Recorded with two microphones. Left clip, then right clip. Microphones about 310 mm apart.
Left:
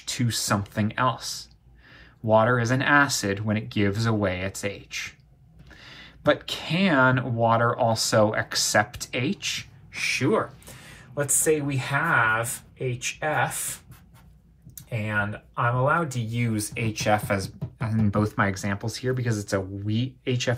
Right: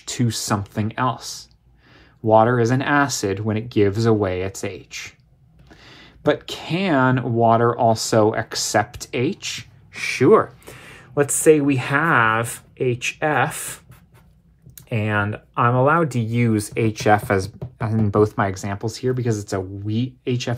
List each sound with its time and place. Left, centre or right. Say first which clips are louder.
0.0 s speech: right 3 dB; right
14.9 s speech: right 5 dB; right